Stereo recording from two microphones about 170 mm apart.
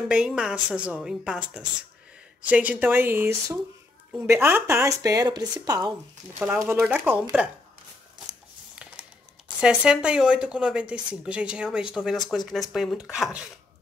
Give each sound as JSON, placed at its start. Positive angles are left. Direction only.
{"t": 0.1, "sound": "speech", "side_deg": -5}
{"t": 4.3, "sound": "speech", "side_deg": -15}
{"t": 6.4, "sound": "speech", "side_deg": -10}
{"t": 9.6, "sound": "speech", "side_deg": -5}